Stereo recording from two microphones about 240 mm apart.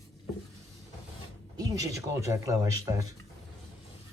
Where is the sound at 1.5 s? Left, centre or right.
Centre.